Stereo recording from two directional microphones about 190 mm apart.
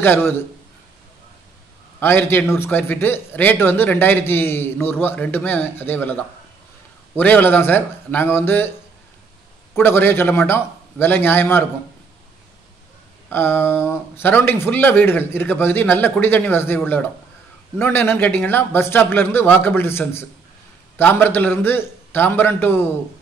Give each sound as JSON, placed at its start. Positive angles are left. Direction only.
{"t": 0.0, "sound": "speech", "side_deg": 10}
{"t": 2.0, "sound": "speech", "side_deg": 10}
{"t": 9.8, "sound": "speech", "side_deg": 10}
{"t": 13.3, "sound": "speech", "side_deg": 10}